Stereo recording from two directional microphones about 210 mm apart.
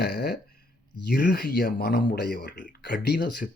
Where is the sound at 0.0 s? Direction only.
50° left (ahead or behind).